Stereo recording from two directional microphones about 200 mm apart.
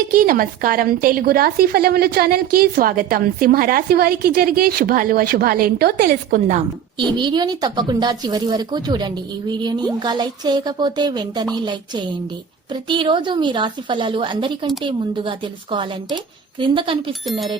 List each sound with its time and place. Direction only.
0.1 s a woman's voice: 45° right (ahead or behind)
7.2 s speech: 20° right (ahead or behind)
12.9 s speech: 25° right (ahead or behind)